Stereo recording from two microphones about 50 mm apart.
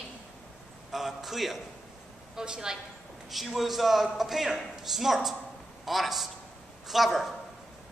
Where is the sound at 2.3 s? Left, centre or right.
Centre.